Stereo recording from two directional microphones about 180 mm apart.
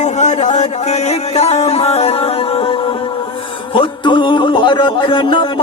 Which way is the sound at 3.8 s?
25° left (ahead or behind).